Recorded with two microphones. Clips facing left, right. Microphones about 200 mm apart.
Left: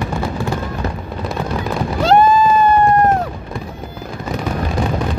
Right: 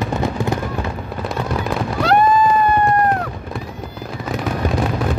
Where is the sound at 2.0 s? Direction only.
25° left (ahead or behind).